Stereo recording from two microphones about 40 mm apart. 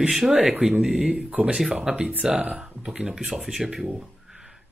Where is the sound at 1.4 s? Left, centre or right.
Right; by 3.6 s centre.